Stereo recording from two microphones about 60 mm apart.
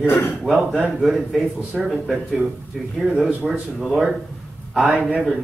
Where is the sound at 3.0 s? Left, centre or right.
Centre.